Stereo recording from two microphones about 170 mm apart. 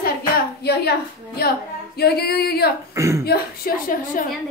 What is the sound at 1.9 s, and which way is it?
Singing, 65° left (ahead or behind).